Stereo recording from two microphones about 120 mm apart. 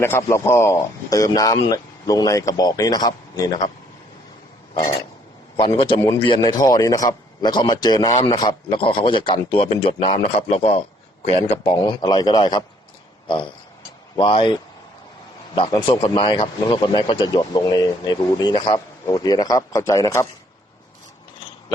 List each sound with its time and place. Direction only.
0.0 s a man's voice: 20° left (ahead or behind)
5.5 s a man's voice: 45° left (ahead or behind)
11.7 s a man's voice: 40° left (ahead or behind)